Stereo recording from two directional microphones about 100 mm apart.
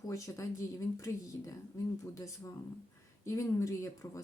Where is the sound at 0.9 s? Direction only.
30° left (ahead or behind).